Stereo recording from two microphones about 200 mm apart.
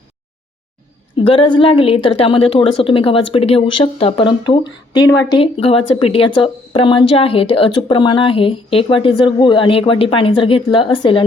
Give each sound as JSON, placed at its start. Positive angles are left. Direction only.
{"t": 1.2, "sound": "a woman's voice", "side_deg": 25}